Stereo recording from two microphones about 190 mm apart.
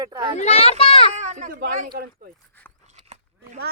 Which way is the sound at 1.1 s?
40° right (ahead or behind).